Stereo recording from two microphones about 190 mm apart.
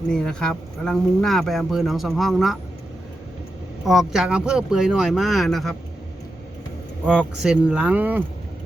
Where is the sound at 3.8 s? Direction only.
Centre (ahead or behind).